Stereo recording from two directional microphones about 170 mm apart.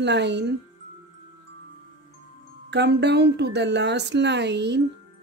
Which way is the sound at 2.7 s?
85° right.